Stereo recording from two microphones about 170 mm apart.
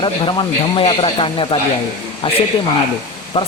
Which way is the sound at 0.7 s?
30° left (ahead or behind).